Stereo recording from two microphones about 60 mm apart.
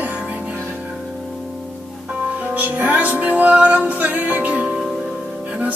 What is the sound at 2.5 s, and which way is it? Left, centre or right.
Music, right.